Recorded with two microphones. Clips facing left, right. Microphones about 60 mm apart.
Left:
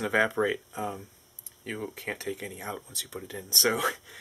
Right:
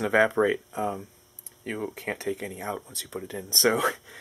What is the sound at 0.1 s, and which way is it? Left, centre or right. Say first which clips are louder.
Speech: right 4 dB; centre.